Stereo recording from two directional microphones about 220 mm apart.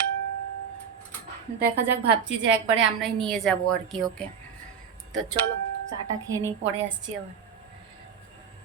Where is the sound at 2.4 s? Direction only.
55° right (ahead or behind).